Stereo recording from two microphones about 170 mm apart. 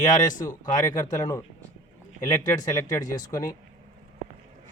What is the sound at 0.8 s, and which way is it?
A man's voice, 20° left (ahead or behind).